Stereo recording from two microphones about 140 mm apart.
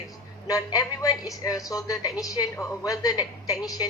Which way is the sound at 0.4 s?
25° left (ahead or behind).